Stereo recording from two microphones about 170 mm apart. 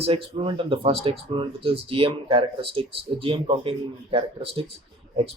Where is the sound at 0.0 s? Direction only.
30° right (ahead or behind).